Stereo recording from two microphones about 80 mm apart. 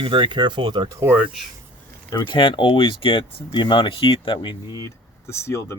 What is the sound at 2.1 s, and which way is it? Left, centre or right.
Speech, left.